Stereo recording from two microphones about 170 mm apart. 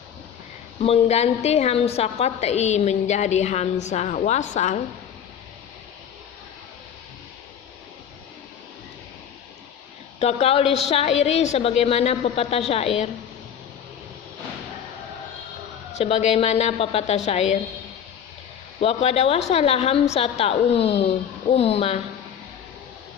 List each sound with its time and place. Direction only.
0.8 s a woman's voice: 40° left (ahead or behind)
10.2 s a woman's voice: 35° left (ahead or behind)
16.0 s a woman's voice: 40° left (ahead or behind)
18.8 s a woman's voice: 35° left (ahead or behind)